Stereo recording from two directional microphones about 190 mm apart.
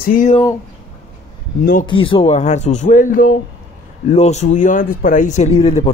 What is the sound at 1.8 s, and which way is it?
Speech, 25° left (ahead or behind).